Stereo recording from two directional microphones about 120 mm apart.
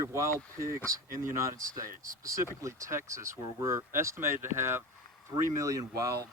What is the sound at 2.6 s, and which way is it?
Speech, 25° right (ahead or behind).